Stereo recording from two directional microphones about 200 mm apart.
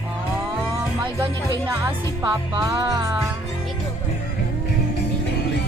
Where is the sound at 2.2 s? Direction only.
15° right (ahead or behind).